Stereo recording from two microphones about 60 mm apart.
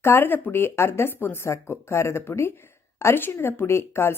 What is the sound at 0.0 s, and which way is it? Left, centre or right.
A woman's voice, left.